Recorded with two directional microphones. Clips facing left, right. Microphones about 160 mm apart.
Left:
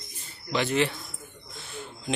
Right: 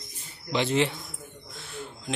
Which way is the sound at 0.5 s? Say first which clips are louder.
Right 1 dB; 20° right (ahead or behind).